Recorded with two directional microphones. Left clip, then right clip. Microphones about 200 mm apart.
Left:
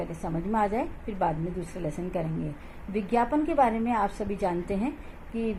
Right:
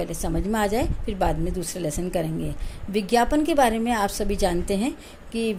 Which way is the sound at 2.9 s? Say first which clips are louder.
Right 5 dB; 65° right (ahead or behind).